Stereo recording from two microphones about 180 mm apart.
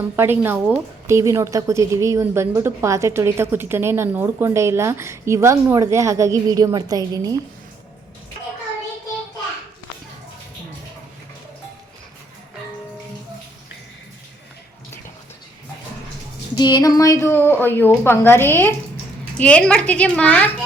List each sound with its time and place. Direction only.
0.2 s a woman's voice: 10° right (ahead or behind)
16.6 s a woman's voice: 25° left (ahead or behind); by 20.5 s 5° left (ahead or behind)